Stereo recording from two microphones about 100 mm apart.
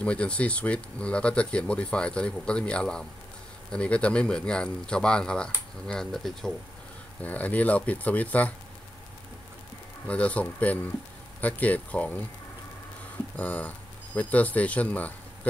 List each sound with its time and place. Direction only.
0.0 s speech: 10° left (ahead or behind)
7.2 s speech: 15° left (ahead or behind)
10.0 s speech: 15° left (ahead or behind)
13.4 s speech: 15° left (ahead or behind)